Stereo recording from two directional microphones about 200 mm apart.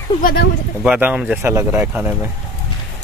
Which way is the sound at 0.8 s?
5° right (ahead or behind).